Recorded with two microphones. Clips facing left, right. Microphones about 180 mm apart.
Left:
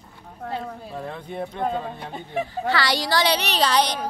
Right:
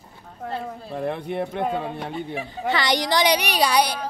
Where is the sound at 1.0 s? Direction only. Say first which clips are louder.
Right 7 dB; 70° right (ahead or behind).